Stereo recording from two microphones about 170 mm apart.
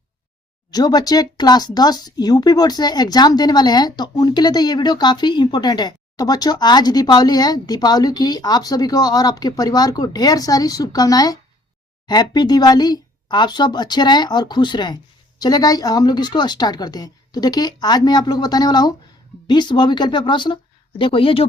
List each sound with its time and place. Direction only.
0.7 s speech: 25° left (ahead or behind)